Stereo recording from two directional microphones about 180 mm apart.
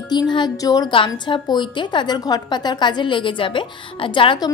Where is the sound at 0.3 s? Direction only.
25° left (ahead or behind).